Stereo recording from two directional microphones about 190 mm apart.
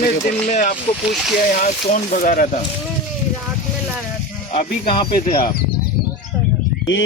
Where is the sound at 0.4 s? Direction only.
40° left (ahead or behind).